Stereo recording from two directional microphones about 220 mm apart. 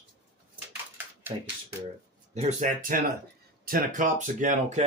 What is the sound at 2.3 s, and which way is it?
Speech, 30° right (ahead or behind).